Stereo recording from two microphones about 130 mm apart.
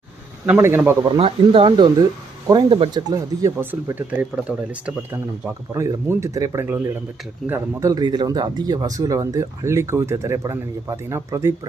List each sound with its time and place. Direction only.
0.4 s speech: 15° right (ahead or behind)
1.2 s speech: 45° right (ahead or behind)
3.1 s speech: 25° right (ahead or behind)
5.7 s speech: 25° right (ahead or behind)